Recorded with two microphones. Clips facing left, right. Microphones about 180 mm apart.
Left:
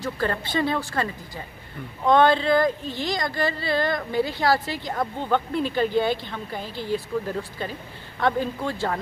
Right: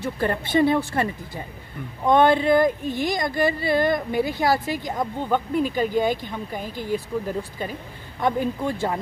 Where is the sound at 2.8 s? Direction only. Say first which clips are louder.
Right 5 dB; 50° right (ahead or behind).